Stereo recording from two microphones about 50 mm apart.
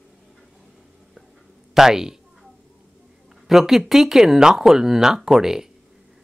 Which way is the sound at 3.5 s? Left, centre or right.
Centre.